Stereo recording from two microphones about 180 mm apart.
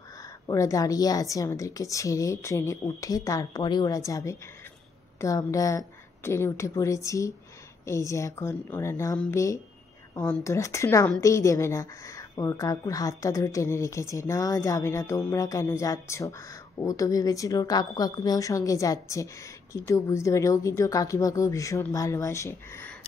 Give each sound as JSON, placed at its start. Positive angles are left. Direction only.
{"t": 0.5, "sound": "a woman's voice", "side_deg": 20}